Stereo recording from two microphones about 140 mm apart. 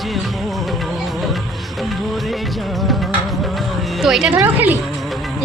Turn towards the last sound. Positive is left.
turn(degrees=-15)  # may be behind; listen again after turning